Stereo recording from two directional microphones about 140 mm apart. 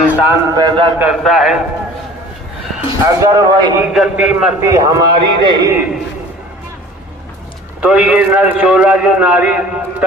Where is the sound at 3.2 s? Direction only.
25° right (ahead or behind).